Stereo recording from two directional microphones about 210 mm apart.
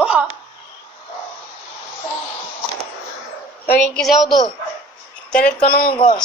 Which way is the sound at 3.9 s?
Centre (ahead or behind).